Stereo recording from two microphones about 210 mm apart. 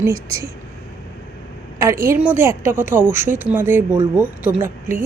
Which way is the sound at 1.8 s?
15° right (ahead or behind).